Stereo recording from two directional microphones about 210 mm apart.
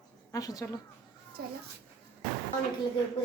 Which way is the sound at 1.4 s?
45° right (ahead or behind).